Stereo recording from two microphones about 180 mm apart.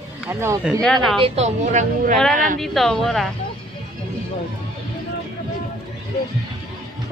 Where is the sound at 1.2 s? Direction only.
35° right (ahead or behind).